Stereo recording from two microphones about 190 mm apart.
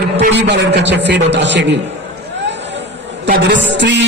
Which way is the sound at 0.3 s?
65° right (ahead or behind).